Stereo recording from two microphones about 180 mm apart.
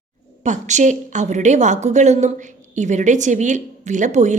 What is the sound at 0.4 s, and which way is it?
A woman's voice, 40° right (ahead or behind).